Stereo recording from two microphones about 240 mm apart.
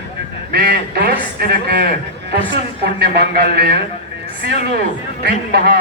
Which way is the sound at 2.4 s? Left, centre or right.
Right.